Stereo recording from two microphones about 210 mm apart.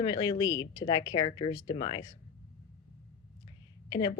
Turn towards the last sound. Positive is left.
turn(degrees=20)  # may be behind; listen again after turning